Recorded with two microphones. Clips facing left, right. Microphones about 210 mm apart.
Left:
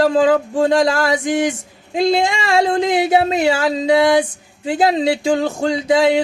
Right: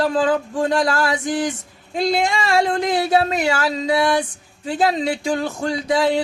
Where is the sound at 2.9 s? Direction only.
15° left (ahead or behind).